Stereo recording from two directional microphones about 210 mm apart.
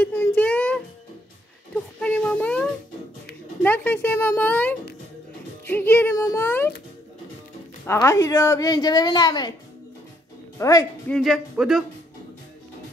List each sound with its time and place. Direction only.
0.0 s music: 10° left (ahead or behind)
2.0 s a sound: 5° left (ahead or behind)
3.6 s a woman's voice: 10° left (ahead or behind)
7.8 s a woman's voice: 15° left (ahead or behind)
10.6 s speech: 15° left (ahead or behind)
11.1 s speech: centre (ahead or behind)